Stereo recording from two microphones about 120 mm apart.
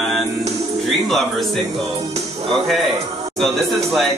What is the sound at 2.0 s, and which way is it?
Music, 60° right (ahead or behind).